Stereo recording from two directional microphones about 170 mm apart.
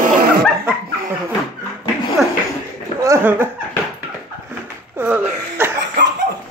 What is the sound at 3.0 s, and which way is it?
Chuckle, 15° right (ahead or behind).